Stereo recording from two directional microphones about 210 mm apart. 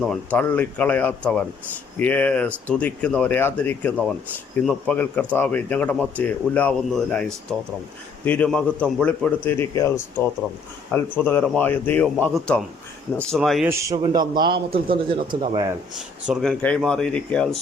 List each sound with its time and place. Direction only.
0.0 s a man's voice: 5° left (ahead or behind)
11.2 s a man's voice: 10° left (ahead or behind)
13.7 s speech: 15° right (ahead or behind)
16.0 s a man's voice: centre (ahead or behind)